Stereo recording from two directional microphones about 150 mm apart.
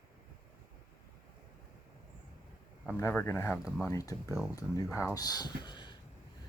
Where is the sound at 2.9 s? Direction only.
15° left (ahead or behind); by 5.9 s 30° left (ahead or behind).